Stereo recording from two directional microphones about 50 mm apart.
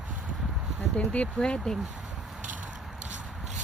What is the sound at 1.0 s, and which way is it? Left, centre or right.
Speech, left.